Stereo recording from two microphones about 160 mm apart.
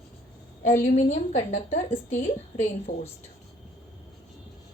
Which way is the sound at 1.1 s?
45° left (ahead or behind).